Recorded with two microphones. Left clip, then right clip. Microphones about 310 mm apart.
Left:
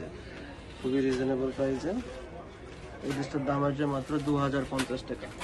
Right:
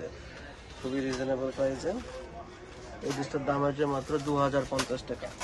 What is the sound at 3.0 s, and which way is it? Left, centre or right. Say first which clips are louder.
Speech: right 1 dB; right.